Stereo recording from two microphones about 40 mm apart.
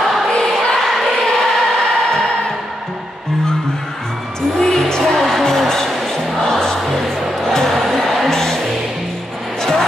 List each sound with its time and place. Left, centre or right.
0.0 s choir: centre
0.7 s a sound: centre
1.2 s choir: centre
4.6 s music: centre
5.9 s music: centre
6.5 s music: centre